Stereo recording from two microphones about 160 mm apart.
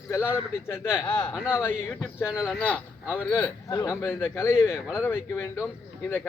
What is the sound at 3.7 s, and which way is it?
Speech, 20° left (ahead or behind).